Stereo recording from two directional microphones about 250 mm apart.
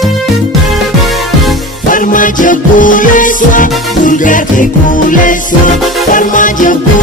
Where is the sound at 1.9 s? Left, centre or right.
Left.